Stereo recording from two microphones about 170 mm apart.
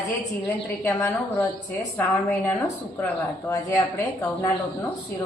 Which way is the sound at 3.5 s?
20° left (ahead or behind).